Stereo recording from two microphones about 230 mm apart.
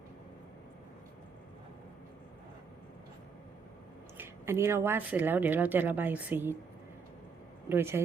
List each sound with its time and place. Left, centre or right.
4.2 s speech: centre
7.7 s speech: centre